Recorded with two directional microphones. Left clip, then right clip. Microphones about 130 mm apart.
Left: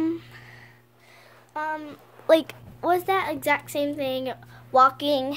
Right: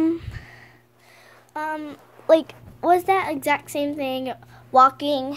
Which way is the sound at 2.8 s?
35° right (ahead or behind).